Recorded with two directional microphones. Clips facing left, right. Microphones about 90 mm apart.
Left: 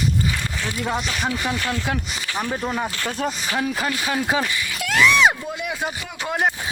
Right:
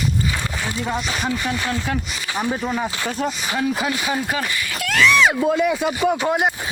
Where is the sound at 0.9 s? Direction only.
20° left (ahead or behind).